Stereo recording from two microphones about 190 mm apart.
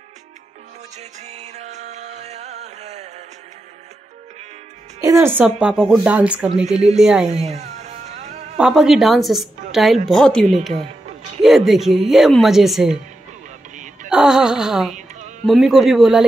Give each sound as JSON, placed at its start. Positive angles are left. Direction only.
{"t": 0.9, "sound": "music", "side_deg": -35}
{"t": 5.0, "sound": "a woman's voice", "side_deg": -15}
{"t": 6.6, "sound": "speech", "side_deg": -35}
{"t": 7.0, "sound": "speech", "side_deg": -5}
{"t": 7.4, "sound": "music", "side_deg": -35}
{"t": 8.5, "sound": "speech", "side_deg": -5}
{"t": 9.7, "sound": "music", "side_deg": 0}
{"t": 10.0, "sound": "speech", "side_deg": 5}
{"t": 14.0, "sound": "speech", "side_deg": -5}